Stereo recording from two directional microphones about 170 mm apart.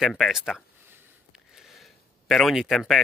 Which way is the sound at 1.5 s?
Centre (ahead or behind).